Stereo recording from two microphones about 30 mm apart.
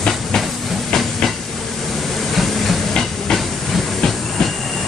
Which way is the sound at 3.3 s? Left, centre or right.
Left.